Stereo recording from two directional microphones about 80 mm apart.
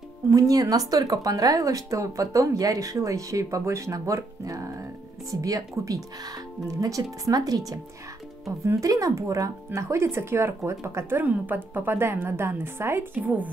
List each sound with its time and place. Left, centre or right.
0.3 s speech: right